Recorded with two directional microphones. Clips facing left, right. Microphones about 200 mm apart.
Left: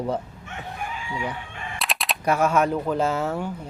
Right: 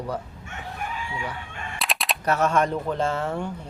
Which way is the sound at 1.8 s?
Centre (ahead or behind).